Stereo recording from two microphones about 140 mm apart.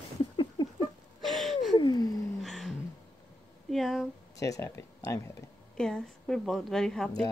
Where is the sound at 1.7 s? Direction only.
30° left (ahead or behind).